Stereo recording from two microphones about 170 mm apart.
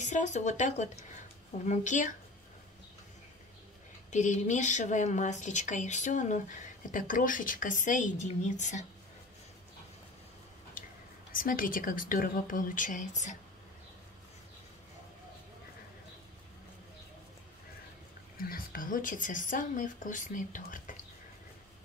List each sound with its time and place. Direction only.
0.0 s speech: 45° left (ahead or behind)
4.1 s speech: 45° left (ahead or behind)
11.3 s speech: 55° left (ahead or behind)
18.4 s speech: 60° left (ahead or behind)